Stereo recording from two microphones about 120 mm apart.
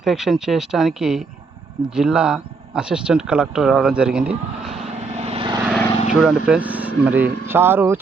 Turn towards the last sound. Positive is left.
turn(degrees=-15)  # may be behind; listen again after turning